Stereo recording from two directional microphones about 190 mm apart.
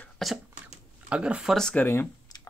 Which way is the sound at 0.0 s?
Centre (ahead or behind).